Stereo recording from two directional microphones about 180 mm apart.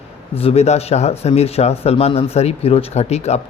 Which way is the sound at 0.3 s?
35° left (ahead or behind).